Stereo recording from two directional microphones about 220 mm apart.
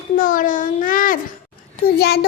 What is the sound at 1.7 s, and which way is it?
Speech, 45° left (ahead or behind).